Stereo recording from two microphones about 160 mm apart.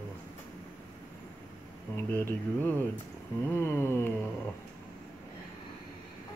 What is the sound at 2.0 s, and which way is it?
Speech, 15° left (ahead or behind).